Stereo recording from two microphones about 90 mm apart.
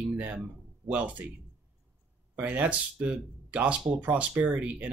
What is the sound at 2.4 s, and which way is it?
Speech, 15° right (ahead or behind).